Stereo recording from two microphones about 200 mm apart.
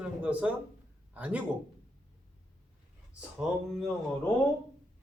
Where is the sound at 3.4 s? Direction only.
5° right (ahead or behind).